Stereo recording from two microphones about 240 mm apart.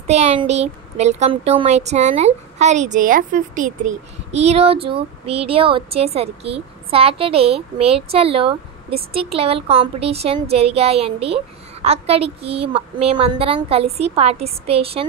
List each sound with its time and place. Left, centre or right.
0.0 s speech: right